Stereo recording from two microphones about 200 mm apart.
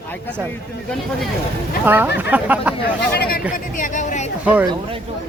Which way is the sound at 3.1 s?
50° left (ahead or behind).